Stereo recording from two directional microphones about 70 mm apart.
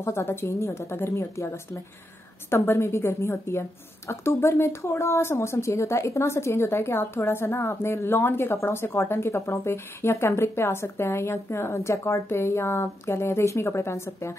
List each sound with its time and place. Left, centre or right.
0.0 s speech: left